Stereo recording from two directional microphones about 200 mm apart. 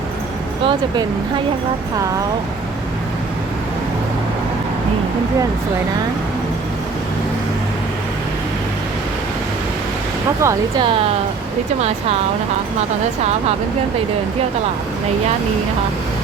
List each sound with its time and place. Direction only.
0.6 s speech: 25° right (ahead or behind)
10.4 s speech: 20° right (ahead or behind)